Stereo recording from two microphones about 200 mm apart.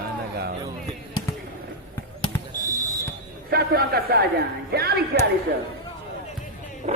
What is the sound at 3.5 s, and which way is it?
A man's voice, 50° right (ahead or behind).